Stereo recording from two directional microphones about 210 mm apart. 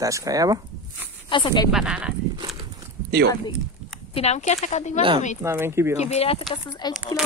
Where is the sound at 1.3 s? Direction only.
25° left (ahead or behind).